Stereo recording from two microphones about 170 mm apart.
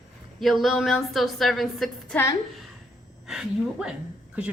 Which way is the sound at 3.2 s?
5° right (ahead or behind).